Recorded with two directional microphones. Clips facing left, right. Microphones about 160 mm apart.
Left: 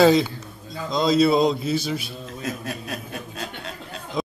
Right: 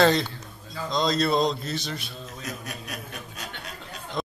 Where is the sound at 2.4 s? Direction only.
30° left (ahead or behind).